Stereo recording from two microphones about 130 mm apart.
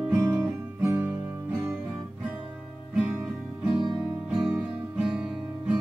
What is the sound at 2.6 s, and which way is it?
Music, 5° right (ahead or behind).